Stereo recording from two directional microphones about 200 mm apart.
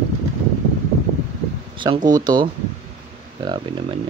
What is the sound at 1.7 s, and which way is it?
Speech, 20° right (ahead or behind).